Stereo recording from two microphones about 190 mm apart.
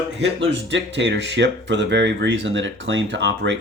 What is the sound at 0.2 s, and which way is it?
Speech, 70° right (ahead or behind).